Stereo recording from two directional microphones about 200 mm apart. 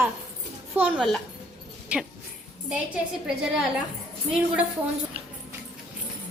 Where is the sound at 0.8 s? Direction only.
5° right (ahead or behind).